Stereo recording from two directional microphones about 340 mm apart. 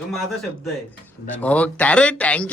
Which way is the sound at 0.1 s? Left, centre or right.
Centre.